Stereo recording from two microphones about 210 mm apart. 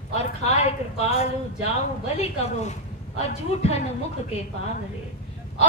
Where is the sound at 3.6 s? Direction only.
30° left (ahead or behind).